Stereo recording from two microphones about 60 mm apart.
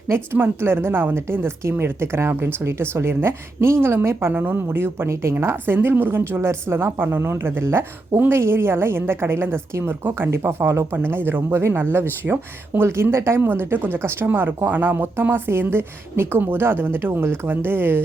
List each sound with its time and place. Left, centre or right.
0.1 s speech: right
5.3 s speech: right
10.9 s speech: right
13.5 s speech: right